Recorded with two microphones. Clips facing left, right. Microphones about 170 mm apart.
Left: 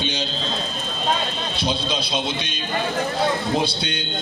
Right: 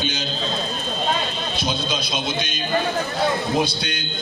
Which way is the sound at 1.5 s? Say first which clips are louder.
Left 1 dB; 30° left (ahead or behind).